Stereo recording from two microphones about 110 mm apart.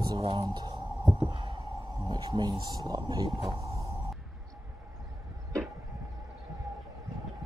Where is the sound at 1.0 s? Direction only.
10° right (ahead or behind).